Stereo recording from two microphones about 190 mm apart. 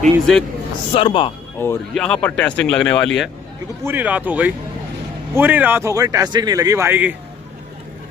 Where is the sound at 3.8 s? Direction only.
10° right (ahead or behind).